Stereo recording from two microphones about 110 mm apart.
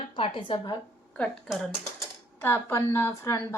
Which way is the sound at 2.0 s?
20° left (ahead or behind).